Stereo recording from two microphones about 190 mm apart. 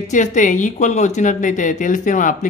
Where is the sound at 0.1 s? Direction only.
40° left (ahead or behind).